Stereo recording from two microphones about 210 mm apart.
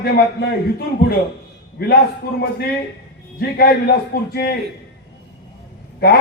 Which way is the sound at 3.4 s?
50° left (ahead or behind).